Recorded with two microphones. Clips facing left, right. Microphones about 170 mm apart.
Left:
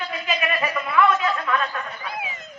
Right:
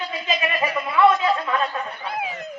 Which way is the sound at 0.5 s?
10° right (ahead or behind).